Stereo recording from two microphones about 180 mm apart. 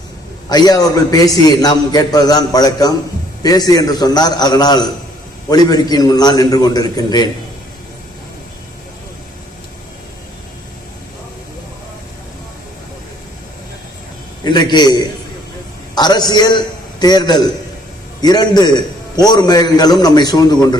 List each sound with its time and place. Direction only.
0.4 s a man's voice: 20° left (ahead or behind)
14.4 s a man's voice: 25° left (ahead or behind)